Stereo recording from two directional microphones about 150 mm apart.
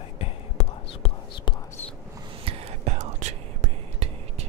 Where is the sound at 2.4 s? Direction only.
40° right (ahead or behind).